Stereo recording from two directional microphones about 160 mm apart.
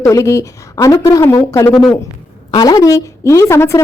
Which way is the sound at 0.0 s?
20° left (ahead or behind).